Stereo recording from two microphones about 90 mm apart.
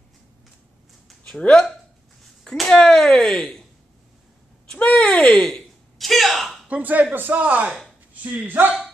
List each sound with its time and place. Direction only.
1.2 s speech: 10° left (ahead or behind)
4.6 s speech: 10° left (ahead or behind)
6.7 s speech: 20° right (ahead or behind)